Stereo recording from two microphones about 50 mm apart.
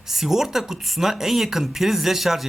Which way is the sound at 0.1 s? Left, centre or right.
Centre.